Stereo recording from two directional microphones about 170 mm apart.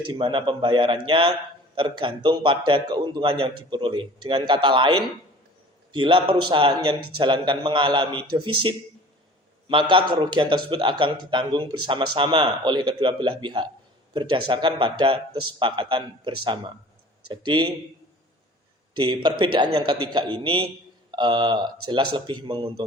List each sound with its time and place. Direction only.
0.0 s a man's voice: 30° right (ahead or behind)
18.9 s a man's voice: 25° right (ahead or behind)